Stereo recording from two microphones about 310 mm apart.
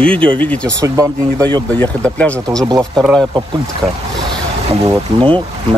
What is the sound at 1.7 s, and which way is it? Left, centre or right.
Speech, centre.